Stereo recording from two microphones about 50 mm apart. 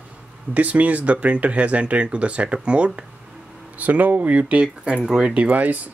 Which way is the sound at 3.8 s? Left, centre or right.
Right.